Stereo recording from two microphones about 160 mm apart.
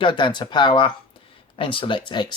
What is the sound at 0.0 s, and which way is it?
Speech, 30° left (ahead or behind).